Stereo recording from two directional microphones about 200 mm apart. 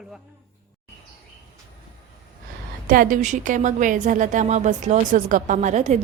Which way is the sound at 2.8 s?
45° right (ahead or behind).